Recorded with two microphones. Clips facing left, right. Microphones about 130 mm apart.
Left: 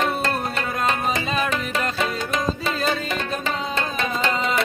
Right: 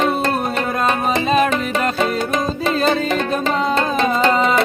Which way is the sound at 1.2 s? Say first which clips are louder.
Right 8 dB; 60° right (ahead or behind).